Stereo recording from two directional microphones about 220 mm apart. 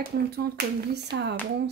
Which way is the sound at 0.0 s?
45° right (ahead or behind).